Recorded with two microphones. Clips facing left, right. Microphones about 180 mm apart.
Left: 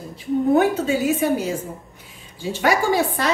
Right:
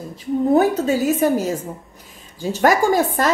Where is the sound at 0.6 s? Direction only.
40° right (ahead or behind).